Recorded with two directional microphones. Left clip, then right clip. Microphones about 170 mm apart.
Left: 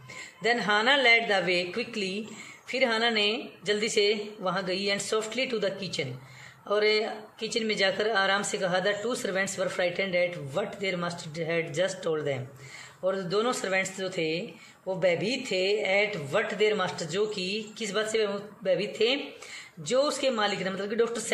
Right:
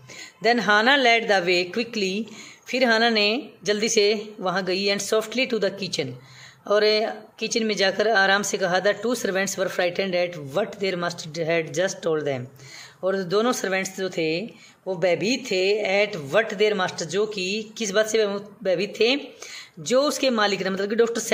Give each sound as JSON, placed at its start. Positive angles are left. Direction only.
{"t": 0.4, "sound": "speech", "side_deg": -45}